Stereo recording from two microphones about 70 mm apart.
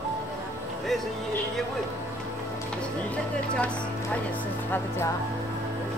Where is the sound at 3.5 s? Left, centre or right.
Centre.